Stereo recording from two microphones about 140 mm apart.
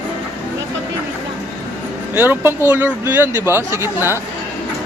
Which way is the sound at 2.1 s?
15° right (ahead or behind).